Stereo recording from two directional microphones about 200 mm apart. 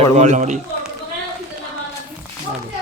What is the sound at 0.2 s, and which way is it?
Speech, 35° right (ahead or behind).